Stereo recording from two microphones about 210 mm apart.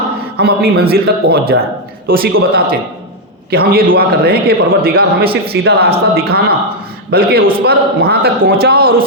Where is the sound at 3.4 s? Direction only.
45° right (ahead or behind).